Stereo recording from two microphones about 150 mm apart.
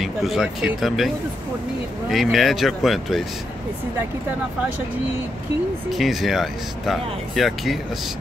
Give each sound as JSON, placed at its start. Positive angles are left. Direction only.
{"t": 0.0, "sound": "speech", "side_deg": 0}
{"t": 5.9, "sound": "speech", "side_deg": 0}